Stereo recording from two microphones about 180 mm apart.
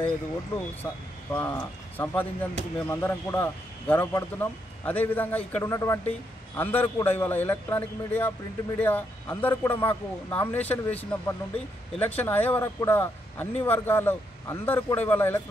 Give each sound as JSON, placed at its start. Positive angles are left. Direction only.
{"t": 0.8, "sound": "speech", "side_deg": 20}